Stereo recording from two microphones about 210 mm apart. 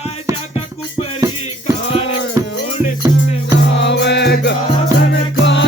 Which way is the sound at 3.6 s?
55° left (ahead or behind).